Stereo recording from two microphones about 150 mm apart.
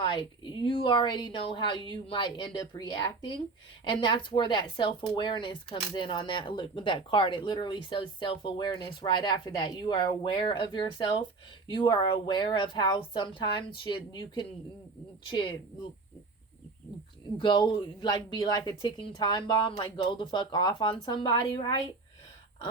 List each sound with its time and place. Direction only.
0.0 s speech: 30° left (ahead or behind)
17.3 s speech: 30° left (ahead or behind)